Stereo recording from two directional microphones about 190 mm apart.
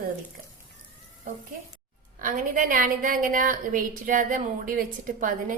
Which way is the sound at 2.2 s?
45° right (ahead or behind).